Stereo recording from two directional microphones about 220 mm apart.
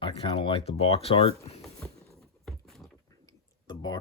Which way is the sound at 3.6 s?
20° left (ahead or behind).